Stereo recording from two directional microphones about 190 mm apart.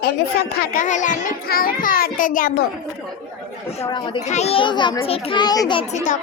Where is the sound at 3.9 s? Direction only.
25° left (ahead or behind).